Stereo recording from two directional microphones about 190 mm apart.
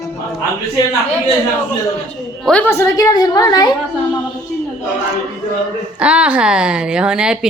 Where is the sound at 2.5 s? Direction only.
10° left (ahead or behind).